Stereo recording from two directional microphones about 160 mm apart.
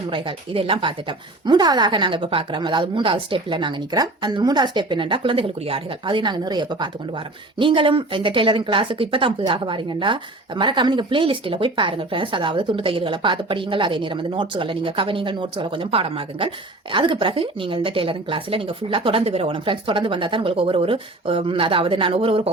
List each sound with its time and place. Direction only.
0.1 s speech: 30° right (ahead or behind)